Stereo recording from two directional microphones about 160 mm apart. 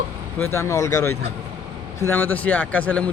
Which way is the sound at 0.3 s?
15° left (ahead or behind).